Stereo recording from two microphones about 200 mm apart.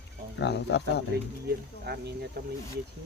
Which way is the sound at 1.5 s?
55° right (ahead or behind).